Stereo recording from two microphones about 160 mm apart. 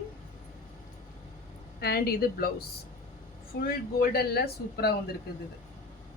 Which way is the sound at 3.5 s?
80° left.